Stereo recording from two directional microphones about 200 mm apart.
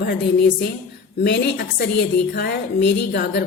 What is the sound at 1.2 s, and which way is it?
A woman's voice, 55° left (ahead or behind).